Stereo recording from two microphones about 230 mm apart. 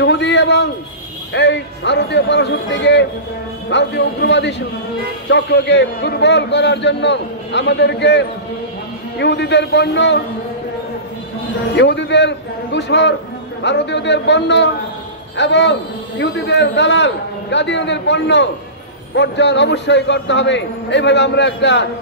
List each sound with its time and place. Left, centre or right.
0.0 s a sound: left
1.3 s a man's voice: left
11.7 s a man's voice: left